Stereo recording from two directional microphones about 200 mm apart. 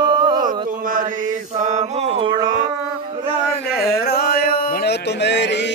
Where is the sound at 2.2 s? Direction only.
20° right (ahead or behind).